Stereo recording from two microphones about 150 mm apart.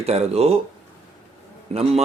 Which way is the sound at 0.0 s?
45° right (ahead or behind).